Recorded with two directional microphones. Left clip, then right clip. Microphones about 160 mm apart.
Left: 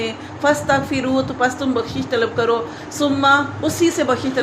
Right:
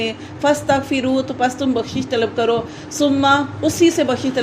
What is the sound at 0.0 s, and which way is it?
A woman's voice, 55° right (ahead or behind).